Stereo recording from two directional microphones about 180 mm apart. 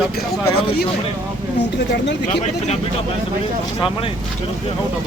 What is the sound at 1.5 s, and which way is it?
Speech, 75° left (ahead or behind).